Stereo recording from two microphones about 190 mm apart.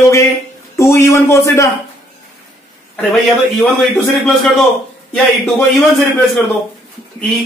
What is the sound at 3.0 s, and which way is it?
A man's voice, 5° left (ahead or behind).